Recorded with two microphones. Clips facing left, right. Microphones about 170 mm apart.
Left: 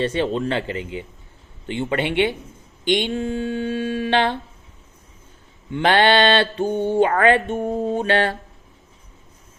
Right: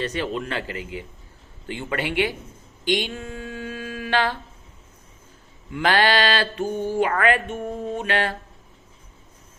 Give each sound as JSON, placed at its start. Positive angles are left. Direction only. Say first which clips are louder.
{"t": 0.0, "sound": "mantra", "louder": "left 5 dB", "side_deg": 25}
{"t": 5.7, "sound": "mantra", "louder": "left 4 dB", "side_deg": 25}